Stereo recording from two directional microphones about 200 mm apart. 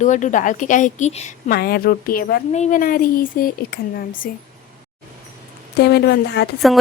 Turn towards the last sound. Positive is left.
turn(degrees=55)  # may be behind; listen again after turning